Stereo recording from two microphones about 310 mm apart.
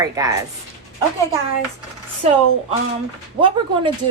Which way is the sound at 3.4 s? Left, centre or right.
Centre.